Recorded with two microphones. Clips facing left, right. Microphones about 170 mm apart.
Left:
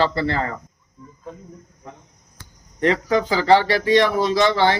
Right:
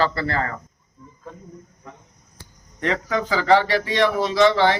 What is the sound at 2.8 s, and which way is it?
Speech, 35° left (ahead or behind).